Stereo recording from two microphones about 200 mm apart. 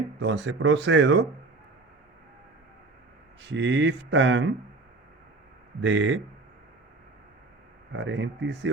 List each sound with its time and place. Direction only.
0.2 s speech: 60° right (ahead or behind)
3.4 s speech: 65° right (ahead or behind)
5.8 s speech: 65° right (ahead or behind)
7.9 s speech: 65° right (ahead or behind)